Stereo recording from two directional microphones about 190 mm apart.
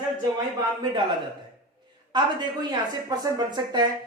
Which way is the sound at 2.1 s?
20° right (ahead or behind).